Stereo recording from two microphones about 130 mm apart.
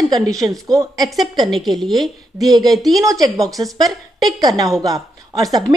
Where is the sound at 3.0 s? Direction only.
25° right (ahead or behind).